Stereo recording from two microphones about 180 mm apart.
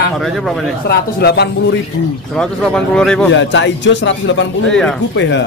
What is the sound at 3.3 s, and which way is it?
A man's voice, 90° left.